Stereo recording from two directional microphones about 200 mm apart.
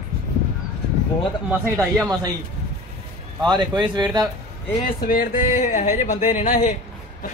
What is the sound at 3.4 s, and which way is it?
Speech, 20° right (ahead or behind).